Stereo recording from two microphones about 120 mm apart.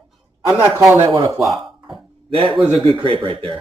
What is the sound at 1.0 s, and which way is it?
Speech, 25° right (ahead or behind).